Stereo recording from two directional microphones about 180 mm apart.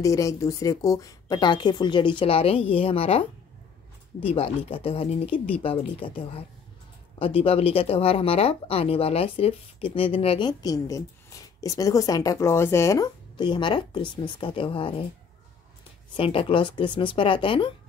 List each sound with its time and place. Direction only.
0.0 s speech: 20° left (ahead or behind)
7.2 s speech: 30° left (ahead or behind)
16.2 s speech: 30° left (ahead or behind)